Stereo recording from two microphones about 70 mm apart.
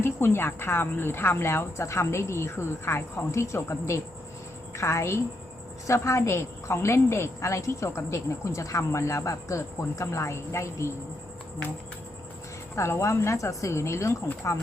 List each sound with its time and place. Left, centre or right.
0.0 s a woman's voice: left
12.7 s a woman's voice: left